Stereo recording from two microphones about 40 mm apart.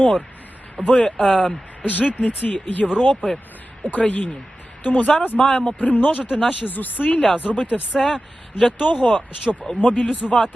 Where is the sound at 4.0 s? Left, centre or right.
Left.